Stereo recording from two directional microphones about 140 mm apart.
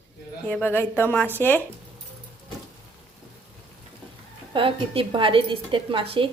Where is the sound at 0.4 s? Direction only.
15° left (ahead or behind).